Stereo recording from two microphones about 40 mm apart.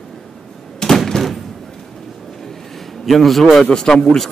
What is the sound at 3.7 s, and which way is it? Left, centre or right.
Speech, centre.